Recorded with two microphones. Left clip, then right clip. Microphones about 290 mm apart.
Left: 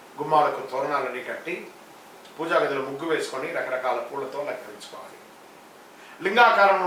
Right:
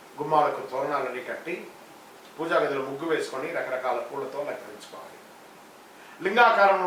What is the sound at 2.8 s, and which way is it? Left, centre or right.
Speech, centre.